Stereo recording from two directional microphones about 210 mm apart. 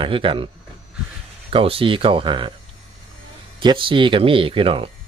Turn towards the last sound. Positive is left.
turn(degrees=-25)  # may be behind; listen again after turning